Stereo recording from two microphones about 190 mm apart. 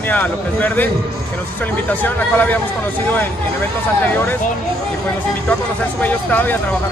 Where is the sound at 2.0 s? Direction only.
10° left (ahead or behind).